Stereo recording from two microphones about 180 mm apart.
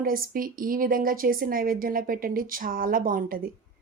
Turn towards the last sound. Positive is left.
turn(degrees=-50)  # may be behind; listen again after turning